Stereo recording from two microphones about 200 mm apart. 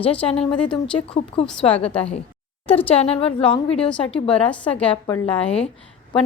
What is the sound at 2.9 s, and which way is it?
Speech, 30° left (ahead or behind).